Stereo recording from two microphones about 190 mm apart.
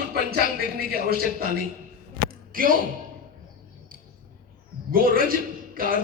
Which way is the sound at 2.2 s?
50° right (ahead or behind).